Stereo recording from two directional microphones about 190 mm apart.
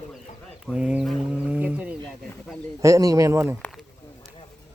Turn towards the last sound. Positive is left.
turn(degrees=-15)  # may be behind; listen again after turning